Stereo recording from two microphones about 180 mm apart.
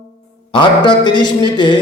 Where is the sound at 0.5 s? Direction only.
25° left (ahead or behind).